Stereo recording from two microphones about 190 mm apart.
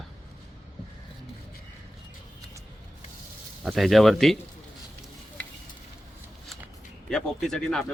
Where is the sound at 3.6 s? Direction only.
Centre (ahead or behind).